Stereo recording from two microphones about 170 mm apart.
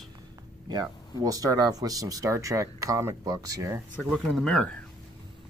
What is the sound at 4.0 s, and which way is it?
Speech, 5° left (ahead or behind).